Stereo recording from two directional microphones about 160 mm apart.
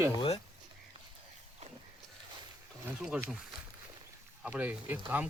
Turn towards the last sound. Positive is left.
turn(degrees=-10)  # may be behind; listen again after turning